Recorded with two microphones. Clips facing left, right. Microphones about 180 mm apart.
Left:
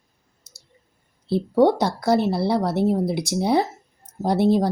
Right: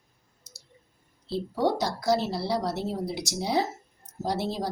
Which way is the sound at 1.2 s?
55° left (ahead or behind).